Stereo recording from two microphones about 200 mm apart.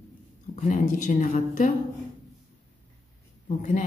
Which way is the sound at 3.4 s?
40° left (ahead or behind).